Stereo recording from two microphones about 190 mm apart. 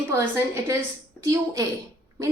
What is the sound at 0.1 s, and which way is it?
A woman's voice, 15° right (ahead or behind).